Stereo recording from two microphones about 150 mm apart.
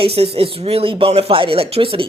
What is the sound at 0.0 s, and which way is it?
Speech, 40° right (ahead or behind).